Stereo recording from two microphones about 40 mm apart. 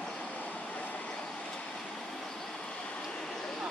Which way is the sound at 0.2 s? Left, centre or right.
Left.